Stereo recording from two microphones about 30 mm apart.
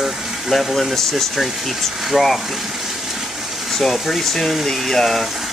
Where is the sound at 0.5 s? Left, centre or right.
Centre.